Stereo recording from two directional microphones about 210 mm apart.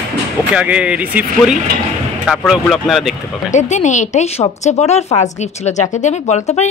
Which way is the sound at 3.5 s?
35° left (ahead or behind).